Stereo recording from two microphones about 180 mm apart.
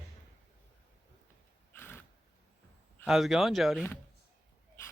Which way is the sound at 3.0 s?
Centre (ahead or behind).